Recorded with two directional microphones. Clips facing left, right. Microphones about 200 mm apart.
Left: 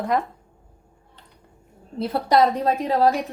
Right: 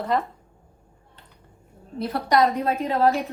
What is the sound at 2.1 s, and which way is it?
Speech, 30° left (ahead or behind).